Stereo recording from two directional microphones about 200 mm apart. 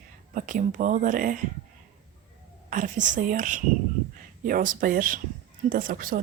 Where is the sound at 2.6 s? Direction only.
40° right (ahead or behind).